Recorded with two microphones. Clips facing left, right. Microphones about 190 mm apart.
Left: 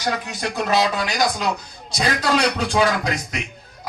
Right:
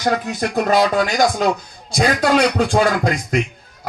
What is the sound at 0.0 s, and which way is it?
A man's voice, 50° right (ahead or behind).